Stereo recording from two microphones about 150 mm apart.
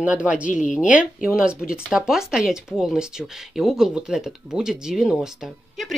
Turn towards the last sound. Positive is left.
turn(degrees=0)  # may be behind; listen again after turning